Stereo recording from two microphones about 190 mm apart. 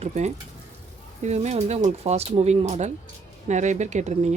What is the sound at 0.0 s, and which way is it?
Speech, 35° right (ahead or behind).